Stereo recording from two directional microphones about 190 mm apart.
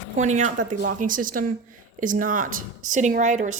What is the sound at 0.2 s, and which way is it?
A woman's voice, 40° right (ahead or behind).